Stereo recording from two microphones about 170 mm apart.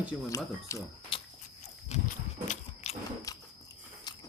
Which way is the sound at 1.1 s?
30° left (ahead or behind).